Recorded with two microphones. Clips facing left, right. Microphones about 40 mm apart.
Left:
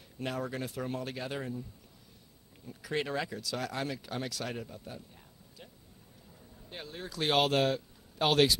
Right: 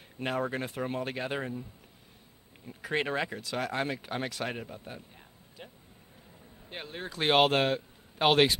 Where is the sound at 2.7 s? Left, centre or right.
Right.